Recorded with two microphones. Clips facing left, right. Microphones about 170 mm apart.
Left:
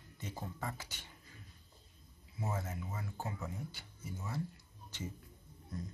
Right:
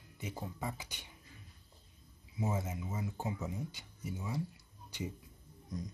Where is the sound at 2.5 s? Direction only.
20° right (ahead or behind).